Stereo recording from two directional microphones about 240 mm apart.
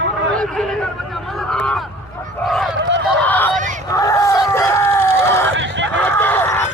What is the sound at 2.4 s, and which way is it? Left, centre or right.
Fowl, centre.